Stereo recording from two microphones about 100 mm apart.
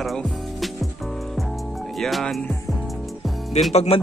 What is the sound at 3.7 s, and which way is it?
Speech, 85° left.